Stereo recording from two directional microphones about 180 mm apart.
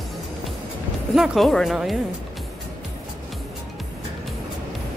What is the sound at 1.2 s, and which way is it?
Speech, centre (ahead or behind).